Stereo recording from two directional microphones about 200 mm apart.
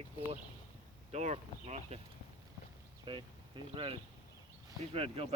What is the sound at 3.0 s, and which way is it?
Speech, 25° right (ahead or behind).